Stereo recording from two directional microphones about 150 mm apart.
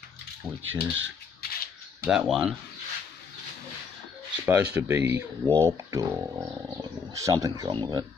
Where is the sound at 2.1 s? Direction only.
5° right (ahead or behind).